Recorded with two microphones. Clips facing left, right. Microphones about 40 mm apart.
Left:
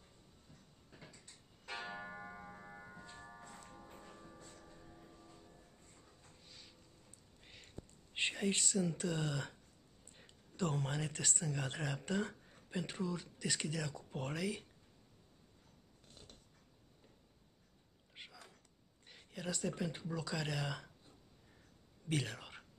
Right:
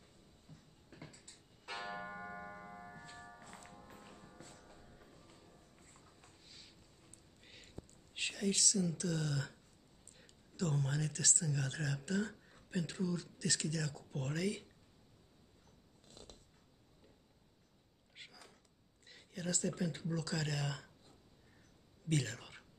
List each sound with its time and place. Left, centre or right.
0.5 s a sound: left
1.7 s music: centre
2.0 s music: centre
2.7 s tick-tock: centre
3.0 s music: centre
4.4 s music: centre
6.4 s vehicle: centre
7.4 s a sound: centre
8.1 s speech: left; by 14.7 s centre
16.2 s dog: centre
18.1 s a sound: centre
19.0 s speech: centre
22.1 s speech: centre